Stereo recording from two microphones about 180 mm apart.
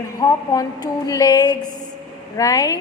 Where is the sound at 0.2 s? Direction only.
20° left (ahead or behind).